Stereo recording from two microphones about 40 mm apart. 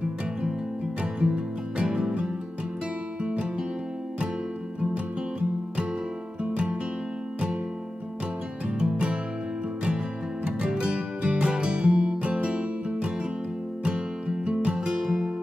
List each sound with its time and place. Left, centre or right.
1.2 s music: right
6.4 s music: right
8.6 s music: right
10.6 s music: centre